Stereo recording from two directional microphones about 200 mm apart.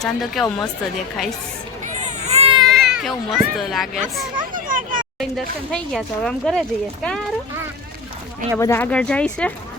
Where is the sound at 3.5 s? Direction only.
Centre (ahead or behind).